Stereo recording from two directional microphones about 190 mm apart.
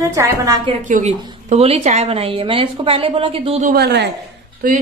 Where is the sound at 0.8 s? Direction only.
40° right (ahead or behind).